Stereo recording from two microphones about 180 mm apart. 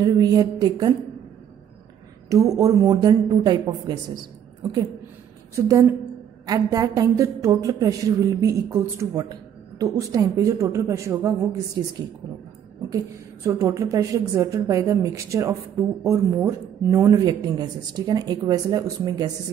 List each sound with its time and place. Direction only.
0.0 s speech: 20° right (ahead or behind)
2.2 s speech: 20° right (ahead or behind)
5.7 s a woman's voice: 20° right (ahead or behind)
12.9 s a woman's voice: 15° right (ahead or behind)